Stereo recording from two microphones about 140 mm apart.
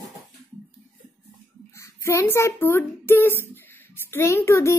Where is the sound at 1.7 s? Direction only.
20° left (ahead or behind).